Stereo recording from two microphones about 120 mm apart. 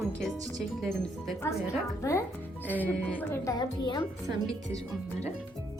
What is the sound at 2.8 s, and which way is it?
Speech, 15° left (ahead or behind).